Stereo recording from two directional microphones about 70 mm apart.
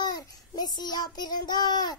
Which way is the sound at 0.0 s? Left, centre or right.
Left.